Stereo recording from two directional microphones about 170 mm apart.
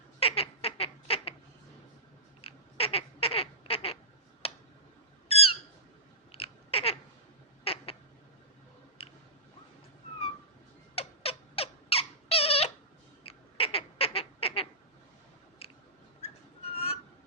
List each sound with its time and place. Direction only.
0.2 s duck: 35° left (ahead or behind)
2.4 s duck: 35° left (ahead or behind)
4.4 s tick: 35° left (ahead or behind)
5.3 s squawk: 35° left (ahead or behind)
6.3 s babbling: 35° left (ahead or behind)
7.6 s a sound: 35° left (ahead or behind)
9.0 s a sound: 35° left (ahead or behind)
10.9 s cat: 35° left (ahead or behind)
13.2 s duck: 35° left (ahead or behind)
16.7 s a sound: 35° left (ahead or behind)